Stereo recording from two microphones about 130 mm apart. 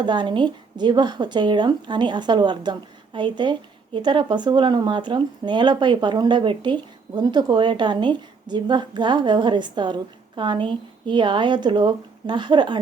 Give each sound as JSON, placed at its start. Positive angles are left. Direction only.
{"t": 0.0, "sound": "speech", "side_deg": -35}